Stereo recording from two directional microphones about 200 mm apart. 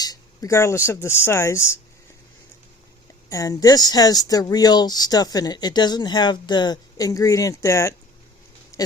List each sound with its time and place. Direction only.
0.0 s speech: 20° left (ahead or behind)
3.2 s speech: 15° left (ahead or behind)